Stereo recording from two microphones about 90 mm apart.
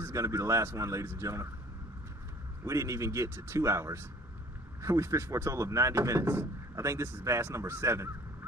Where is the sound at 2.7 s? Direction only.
35° right (ahead or behind).